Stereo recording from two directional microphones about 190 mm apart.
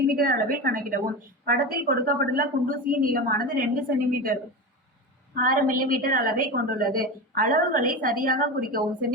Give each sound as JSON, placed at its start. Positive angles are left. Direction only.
{"t": 0.1, "sound": "a woman's voice", "side_deg": -50}